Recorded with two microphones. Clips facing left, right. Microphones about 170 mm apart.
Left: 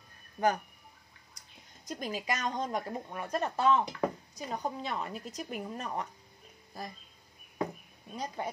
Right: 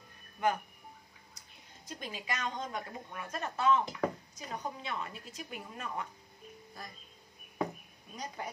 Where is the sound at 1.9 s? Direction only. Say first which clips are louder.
Left 6 dB; 40° left (ahead or behind).